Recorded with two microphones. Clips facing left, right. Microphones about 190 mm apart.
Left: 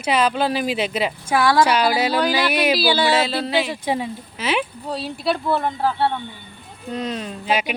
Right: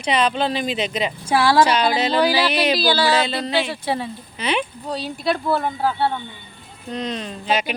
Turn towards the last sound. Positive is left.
turn(degrees=10)  # may be behind; listen again after turning